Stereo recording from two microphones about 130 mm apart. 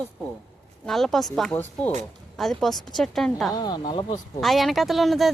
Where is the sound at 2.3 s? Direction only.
Centre (ahead or behind).